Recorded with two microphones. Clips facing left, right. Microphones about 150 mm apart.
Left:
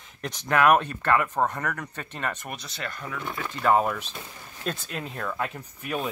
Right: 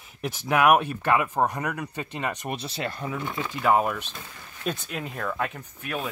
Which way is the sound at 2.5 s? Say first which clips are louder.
Right 5 dB; 30° right (ahead or behind).